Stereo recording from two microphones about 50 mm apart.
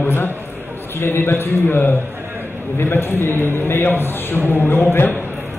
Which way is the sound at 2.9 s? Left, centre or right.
Left.